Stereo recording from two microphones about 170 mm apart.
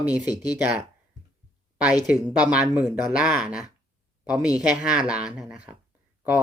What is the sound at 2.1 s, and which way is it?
Speech, 5° right (ahead or behind).